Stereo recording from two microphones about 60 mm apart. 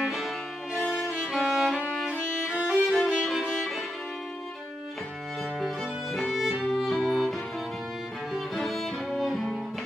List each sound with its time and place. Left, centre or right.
0.7 s violin: centre
6.1 s music: centre